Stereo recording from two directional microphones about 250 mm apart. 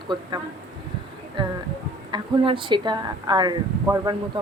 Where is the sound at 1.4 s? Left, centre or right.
Centre.